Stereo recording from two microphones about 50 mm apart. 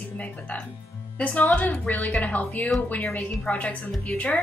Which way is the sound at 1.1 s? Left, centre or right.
Left.